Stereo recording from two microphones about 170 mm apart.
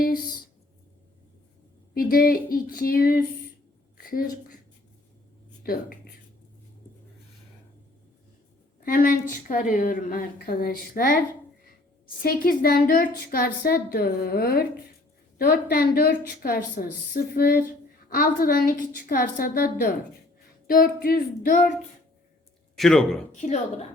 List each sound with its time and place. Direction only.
2.0 s a woman's voice: 60° left (ahead or behind)
3.9 s a sound: 60° left (ahead or behind)
8.8 s a woman's voice: 55° left (ahead or behind)
12.2 s a woman's voice: 60° left (ahead or behind)
15.7 s a woman's voice: 65° left (ahead or behind)
22.7 s a man's voice: 5° left (ahead or behind)
23.3 s a woman's voice: 45° left (ahead or behind)